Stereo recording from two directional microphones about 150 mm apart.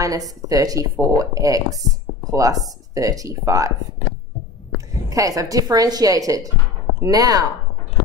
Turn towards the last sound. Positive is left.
turn(degrees=-25)  # may be behind; listen again after turning